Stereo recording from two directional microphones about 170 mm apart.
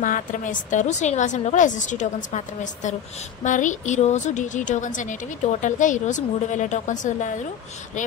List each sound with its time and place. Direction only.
0.0 s a woman's voice: 50° left (ahead or behind)